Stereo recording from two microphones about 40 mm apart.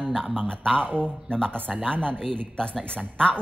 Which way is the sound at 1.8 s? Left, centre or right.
Right.